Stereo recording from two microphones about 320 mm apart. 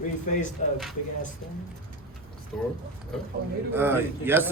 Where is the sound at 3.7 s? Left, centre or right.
Centre.